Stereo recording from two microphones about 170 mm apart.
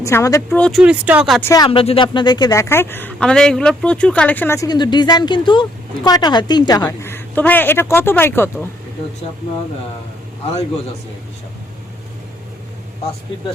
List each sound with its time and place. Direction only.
0.0 s a woman's voice: 15° left (ahead or behind)
0.5 s speech: 5° left (ahead or behind)
0.8 s speech: 5° right (ahead or behind)
1.4 s a woman's voice: 15° left (ahead or behind)
1.6 s a woman's voice: 35° left (ahead or behind); by 8.4 s 15° left (ahead or behind)